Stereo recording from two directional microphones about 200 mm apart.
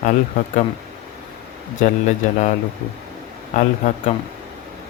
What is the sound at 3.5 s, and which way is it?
Speech, 35° left (ahead or behind).